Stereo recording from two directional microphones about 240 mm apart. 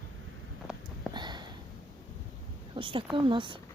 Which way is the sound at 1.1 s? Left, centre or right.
Centre.